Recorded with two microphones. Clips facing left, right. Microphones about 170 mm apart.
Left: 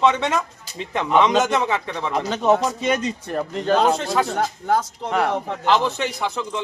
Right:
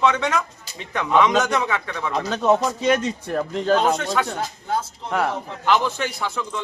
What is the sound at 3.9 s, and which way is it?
Speech, 25° left (ahead or behind).